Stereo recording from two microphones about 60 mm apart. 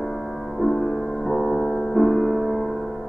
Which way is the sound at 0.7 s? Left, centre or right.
Centre.